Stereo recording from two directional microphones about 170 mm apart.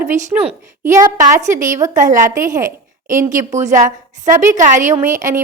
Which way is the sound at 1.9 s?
50° right (ahead or behind).